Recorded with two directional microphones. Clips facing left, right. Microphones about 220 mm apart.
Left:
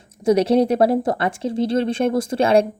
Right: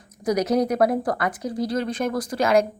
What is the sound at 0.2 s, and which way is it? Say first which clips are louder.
Speech: left 5 dB; 25° left (ahead or behind).